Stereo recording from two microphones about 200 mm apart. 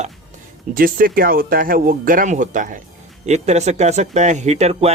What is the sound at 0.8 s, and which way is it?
Speech, 45° right (ahead or behind).